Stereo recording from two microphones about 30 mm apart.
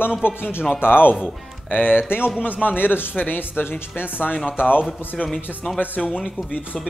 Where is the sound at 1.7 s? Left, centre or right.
Left.